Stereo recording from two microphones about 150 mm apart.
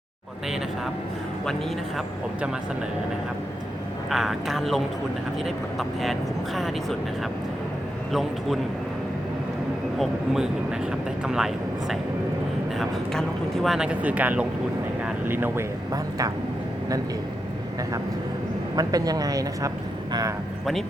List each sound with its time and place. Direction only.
4.1 s speech: centre (ahead or behind)
6.0 s speech: centre (ahead or behind)
8.1 s speech: centre (ahead or behind)
10.0 s speech: 5° right (ahead or behind)
15.0 s vehicle: 15° right (ahead or behind)
15.9 s speech: 25° right (ahead or behind)
18.8 s speech: 25° right (ahead or behind)